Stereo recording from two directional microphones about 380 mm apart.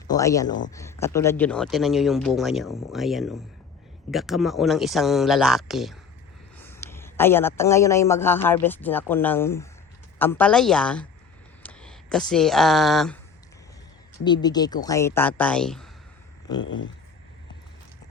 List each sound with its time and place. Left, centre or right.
0.1 s a man's voice: centre
14.3 s speech: centre